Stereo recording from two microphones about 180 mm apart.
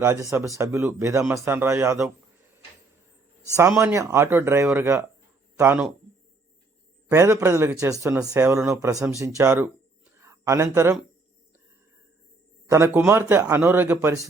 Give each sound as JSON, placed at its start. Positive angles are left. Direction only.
{"t": 0.0, "sound": "a man's voice", "side_deg": -15}
{"t": 3.8, "sound": "a man's voice", "side_deg": -15}
{"t": 7.1, "sound": "a man's voice", "side_deg": -15}
{"t": 10.2, "sound": "a sound", "side_deg": -15}
{"t": 12.7, "sound": "a man's voice", "side_deg": -15}